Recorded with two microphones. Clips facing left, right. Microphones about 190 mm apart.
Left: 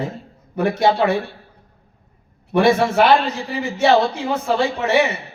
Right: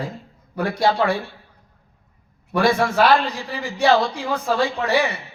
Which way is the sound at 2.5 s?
25° left (ahead or behind).